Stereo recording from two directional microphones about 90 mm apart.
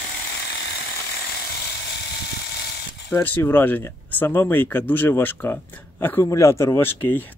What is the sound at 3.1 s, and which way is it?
Speech, 25° left (ahead or behind).